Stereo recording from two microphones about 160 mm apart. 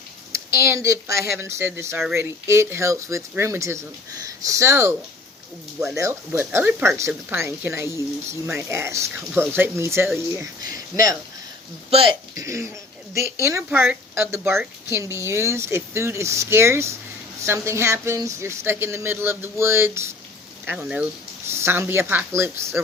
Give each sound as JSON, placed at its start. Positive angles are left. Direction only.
{"t": 0.3, "sound": "speech", "side_deg": -20}
{"t": 6.0, "sound": "speech", "side_deg": -15}
{"t": 11.9, "sound": "speech", "side_deg": -35}
{"t": 12.4, "sound": "speech", "side_deg": -20}
{"t": 13.7, "sound": "a woman's voice", "side_deg": -5}